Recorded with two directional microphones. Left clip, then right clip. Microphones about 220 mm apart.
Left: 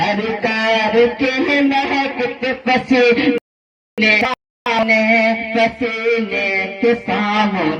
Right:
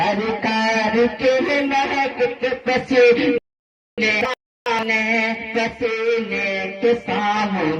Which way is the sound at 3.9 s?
45° left (ahead or behind).